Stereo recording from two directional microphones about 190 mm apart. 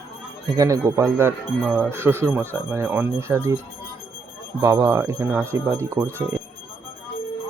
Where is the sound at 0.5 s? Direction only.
20° right (ahead or behind).